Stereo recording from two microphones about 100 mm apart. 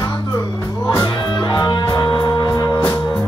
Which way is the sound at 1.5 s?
40° left (ahead or behind).